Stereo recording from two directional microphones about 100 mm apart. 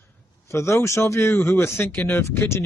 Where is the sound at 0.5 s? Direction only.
25° left (ahead or behind).